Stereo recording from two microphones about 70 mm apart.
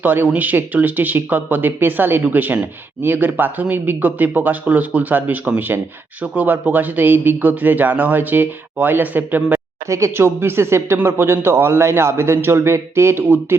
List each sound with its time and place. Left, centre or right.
0.0 s speech: right
9.9 s a man's voice: right